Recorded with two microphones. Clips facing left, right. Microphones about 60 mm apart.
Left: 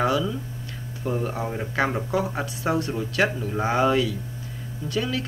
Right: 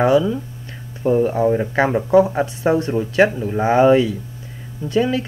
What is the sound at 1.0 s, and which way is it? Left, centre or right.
Speech, right.